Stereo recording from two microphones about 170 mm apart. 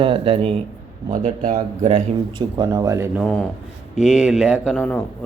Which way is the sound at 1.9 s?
30° right (ahead or behind).